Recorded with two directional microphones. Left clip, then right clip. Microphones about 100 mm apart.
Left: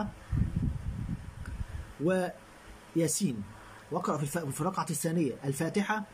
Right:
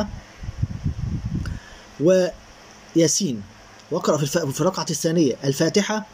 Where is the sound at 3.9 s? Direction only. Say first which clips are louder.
Right 11 dB; 15° right (ahead or behind).